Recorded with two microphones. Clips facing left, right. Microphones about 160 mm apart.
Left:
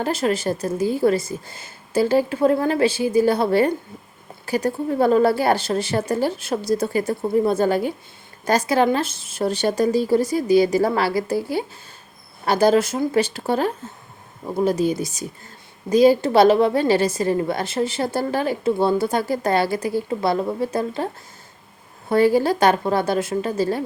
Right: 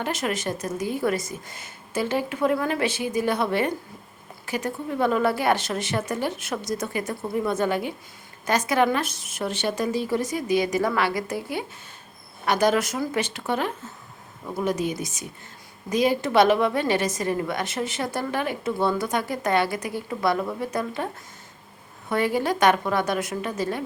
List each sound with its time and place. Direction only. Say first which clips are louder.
0.0 s a woman's voice: left 6 dB; 30° left (ahead or behind)
22.1 s a woman's voice: left 7 dB; 35° left (ahead or behind)